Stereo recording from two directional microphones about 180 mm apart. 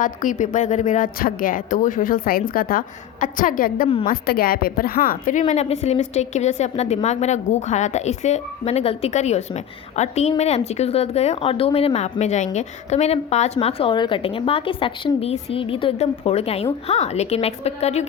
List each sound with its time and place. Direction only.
0.0 s a woman's voice: 45° left (ahead or behind)